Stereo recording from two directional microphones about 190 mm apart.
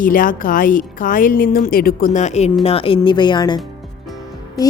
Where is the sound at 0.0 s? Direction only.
45° left (ahead or behind).